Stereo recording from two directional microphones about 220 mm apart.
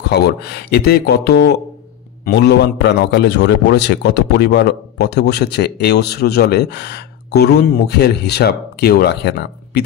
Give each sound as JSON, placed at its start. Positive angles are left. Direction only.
{"t": 0.1, "sound": "a man's voice", "side_deg": 45}